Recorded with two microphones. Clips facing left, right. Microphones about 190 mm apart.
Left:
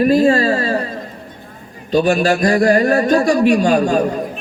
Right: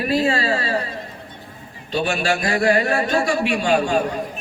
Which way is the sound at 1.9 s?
40° left (ahead or behind).